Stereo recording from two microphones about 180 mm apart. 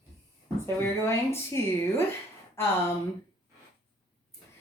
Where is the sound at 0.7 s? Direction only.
15° left (ahead or behind).